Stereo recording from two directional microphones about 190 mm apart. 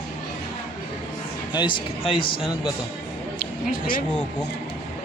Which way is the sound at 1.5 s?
25° left (ahead or behind).